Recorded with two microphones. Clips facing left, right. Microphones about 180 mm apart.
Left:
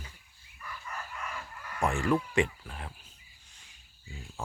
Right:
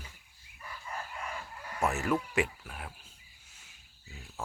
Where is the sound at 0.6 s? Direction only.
30° right (ahead or behind).